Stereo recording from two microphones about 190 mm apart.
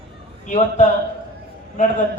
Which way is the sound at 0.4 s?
40° left (ahead or behind).